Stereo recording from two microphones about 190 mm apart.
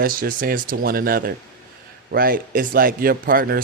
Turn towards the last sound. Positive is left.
turn(degrees=-50)  # may be behind; listen again after turning